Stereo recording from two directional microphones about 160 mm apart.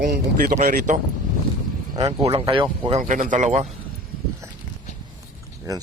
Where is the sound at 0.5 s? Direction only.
50° right (ahead or behind).